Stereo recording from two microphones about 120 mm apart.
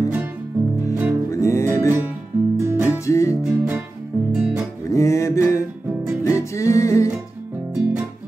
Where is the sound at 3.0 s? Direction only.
25° left (ahead or behind).